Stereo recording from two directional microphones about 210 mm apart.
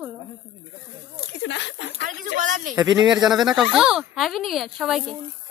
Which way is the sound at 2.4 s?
40° right (ahead or behind).